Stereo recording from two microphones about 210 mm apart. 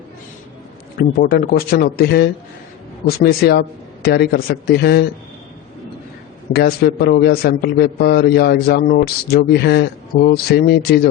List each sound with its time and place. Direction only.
0.9 s a man's voice: 45° left (ahead or behind)
6.5 s a man's voice: 45° left (ahead or behind)